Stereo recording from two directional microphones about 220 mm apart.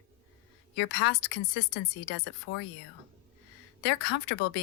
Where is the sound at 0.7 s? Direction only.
50° left (ahead or behind).